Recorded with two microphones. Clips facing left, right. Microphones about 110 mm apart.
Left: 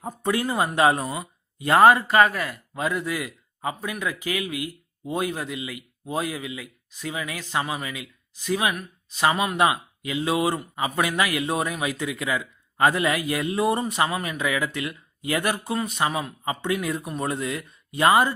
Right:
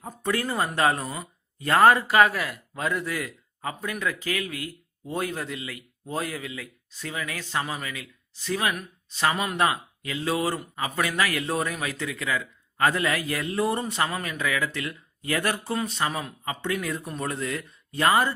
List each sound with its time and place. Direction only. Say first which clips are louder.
0.0 s speech: left 3 dB; 20° left (ahead or behind)
1.0 s a sound: left 4 dB; 10° left (ahead or behind)
1.6 s a man's voice: left 3 dB; 15° left (ahead or behind)
1.9 s a man's voice: left 1 dB; centre (ahead or behind)
9.6 s a man's voice: left 3 dB; 15° left (ahead or behind)
16.4 s speech: left 2 dB; 25° left (ahead or behind)